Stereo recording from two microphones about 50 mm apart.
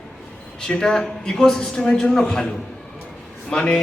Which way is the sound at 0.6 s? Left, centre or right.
Centre.